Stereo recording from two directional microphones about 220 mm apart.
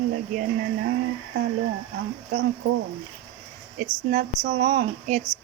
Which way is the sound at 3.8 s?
40° right (ahead or behind).